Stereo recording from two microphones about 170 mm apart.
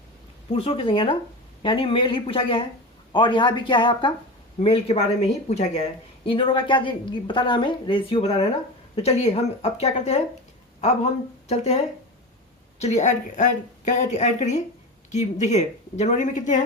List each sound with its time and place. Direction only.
0.5 s a woman's voice: 35° left (ahead or behind)
6.2 s a woman's voice: 30° left (ahead or behind)
11.4 s speech: 40° left (ahead or behind)
12.8 s a woman's voice: 45° left (ahead or behind)